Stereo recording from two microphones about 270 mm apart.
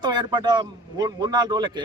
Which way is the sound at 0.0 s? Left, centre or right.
Centre.